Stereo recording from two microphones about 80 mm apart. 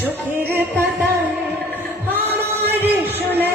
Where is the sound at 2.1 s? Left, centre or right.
Right.